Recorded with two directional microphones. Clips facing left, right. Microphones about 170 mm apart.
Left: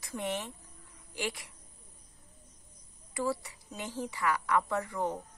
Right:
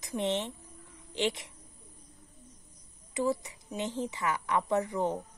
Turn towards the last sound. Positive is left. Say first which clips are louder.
# right 4 dB
turn(degrees=-20)  # may be behind; listen again after turning